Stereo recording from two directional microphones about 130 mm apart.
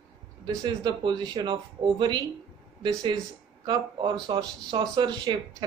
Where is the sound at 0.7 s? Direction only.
35° right (ahead or behind).